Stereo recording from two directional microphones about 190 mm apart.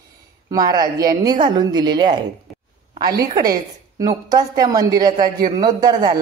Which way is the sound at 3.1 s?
20° right (ahead or behind).